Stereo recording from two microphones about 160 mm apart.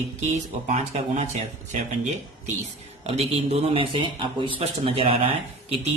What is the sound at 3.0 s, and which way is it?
A man's voice, 40° right (ahead or behind).